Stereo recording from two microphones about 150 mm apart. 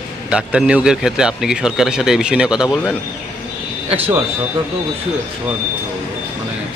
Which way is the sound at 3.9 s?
15° right (ahead or behind).